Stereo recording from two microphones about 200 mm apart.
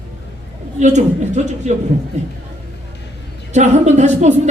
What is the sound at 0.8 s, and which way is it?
Speech, 35° right (ahead or behind).